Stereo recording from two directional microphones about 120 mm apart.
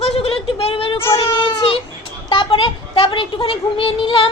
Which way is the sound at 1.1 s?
40° left (ahead or behind).